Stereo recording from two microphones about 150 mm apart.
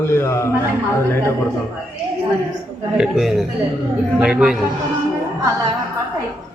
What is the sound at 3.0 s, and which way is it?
A man's voice, centre (ahead or behind).